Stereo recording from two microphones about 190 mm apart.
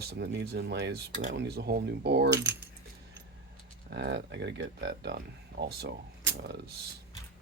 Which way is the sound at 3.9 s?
65° right (ahead or behind).